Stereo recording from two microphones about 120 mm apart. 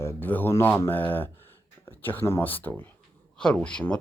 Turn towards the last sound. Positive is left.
turn(degrees=10)  # may be behind; listen again after turning